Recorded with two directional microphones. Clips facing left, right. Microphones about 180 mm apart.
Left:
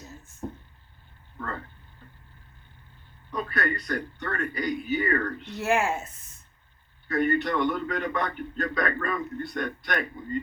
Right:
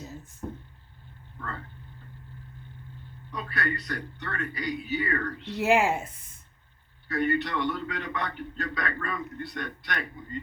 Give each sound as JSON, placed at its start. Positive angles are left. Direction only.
{"t": 0.4, "sound": "a sound", "side_deg": 30}
{"t": 3.3, "sound": "a man's voice", "side_deg": 50}
{"t": 5.5, "sound": "speech", "side_deg": -15}
{"t": 7.1, "sound": "a man's voice", "side_deg": 50}